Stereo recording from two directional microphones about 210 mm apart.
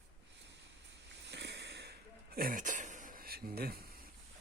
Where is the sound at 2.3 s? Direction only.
40° right (ahead or behind).